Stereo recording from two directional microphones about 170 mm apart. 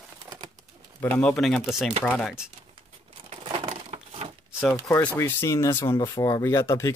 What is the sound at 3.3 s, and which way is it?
Crumpling, 30° right (ahead or behind).